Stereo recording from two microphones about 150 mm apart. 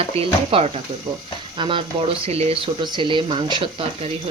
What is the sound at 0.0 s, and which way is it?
Speech, 40° right (ahead or behind).